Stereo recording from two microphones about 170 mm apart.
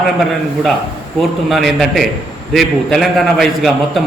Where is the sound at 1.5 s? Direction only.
Centre (ahead or behind).